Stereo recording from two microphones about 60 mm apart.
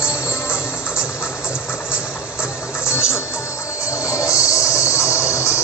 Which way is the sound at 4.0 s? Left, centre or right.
Left.